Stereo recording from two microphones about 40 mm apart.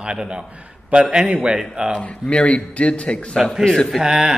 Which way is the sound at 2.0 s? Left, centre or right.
Left.